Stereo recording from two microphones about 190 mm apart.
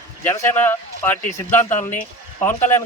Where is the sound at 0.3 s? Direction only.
10° left (ahead or behind).